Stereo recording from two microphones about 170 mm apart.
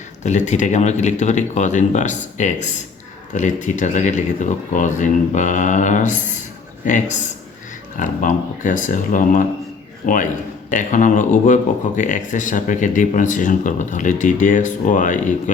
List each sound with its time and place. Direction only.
0.2 s speech: 45° left (ahead or behind)
10.7 s speech: 50° left (ahead or behind)